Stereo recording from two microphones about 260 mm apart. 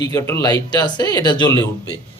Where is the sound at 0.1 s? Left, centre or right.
Centre.